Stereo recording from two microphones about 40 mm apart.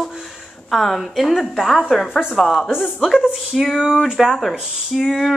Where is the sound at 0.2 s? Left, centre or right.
Centre.